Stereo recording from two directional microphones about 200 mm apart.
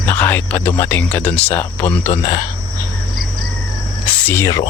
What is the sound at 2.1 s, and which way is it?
Speech, 20° left (ahead or behind).